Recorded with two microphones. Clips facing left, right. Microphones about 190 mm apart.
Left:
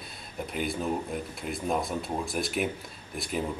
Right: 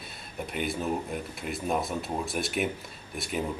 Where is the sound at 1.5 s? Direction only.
5° right (ahead or behind).